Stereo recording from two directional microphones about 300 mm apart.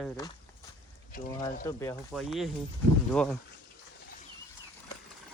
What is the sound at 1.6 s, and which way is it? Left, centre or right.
Speech, centre.